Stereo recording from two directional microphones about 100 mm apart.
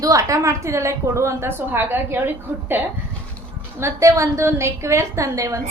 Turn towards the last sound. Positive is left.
turn(degrees=-30)  # may be behind; listen again after turning